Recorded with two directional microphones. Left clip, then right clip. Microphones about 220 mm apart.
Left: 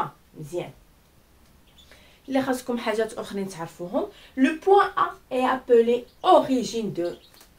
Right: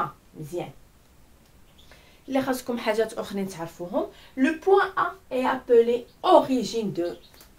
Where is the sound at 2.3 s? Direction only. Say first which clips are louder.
Left 1 dB; 5° right (ahead or behind).